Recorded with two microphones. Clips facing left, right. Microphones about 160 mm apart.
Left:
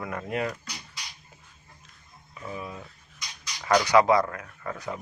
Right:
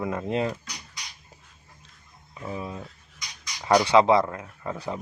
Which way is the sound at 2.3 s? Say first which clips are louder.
Right 3 dB; 25° right (ahead or behind).